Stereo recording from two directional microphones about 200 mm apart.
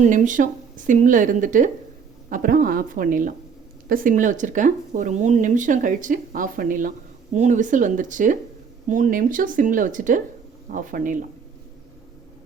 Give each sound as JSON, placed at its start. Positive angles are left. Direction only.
{"t": 0.0, "sound": "a woman's voice", "side_deg": -40}